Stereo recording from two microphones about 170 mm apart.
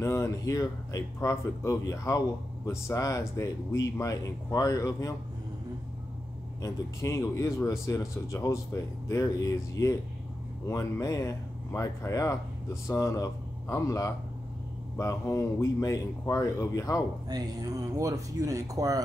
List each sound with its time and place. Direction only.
0.0 s speech: 15° left (ahead or behind)
6.6 s speech: 15° left (ahead or behind)
17.3 s speech: 20° right (ahead or behind)